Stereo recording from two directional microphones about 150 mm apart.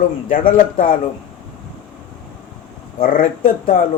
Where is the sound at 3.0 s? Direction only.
65° left (ahead or behind).